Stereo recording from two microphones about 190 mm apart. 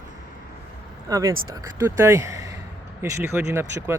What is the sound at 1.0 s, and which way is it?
Speech, 20° right (ahead or behind).